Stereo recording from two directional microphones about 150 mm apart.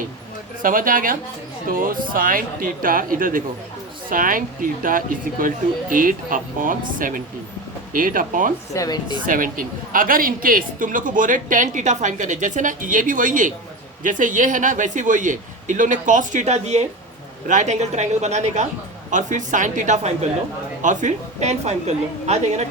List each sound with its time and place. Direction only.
0.6 s a woman's voice: 65° right (ahead or behind)
8.7 s a woman's voice: 25° left (ahead or behind)
9.2 s a woman's voice: 65° right (ahead or behind); by 22.6 s 50° right (ahead or behind)